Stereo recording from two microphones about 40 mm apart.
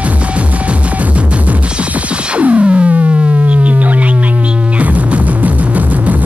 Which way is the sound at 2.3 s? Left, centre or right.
Right.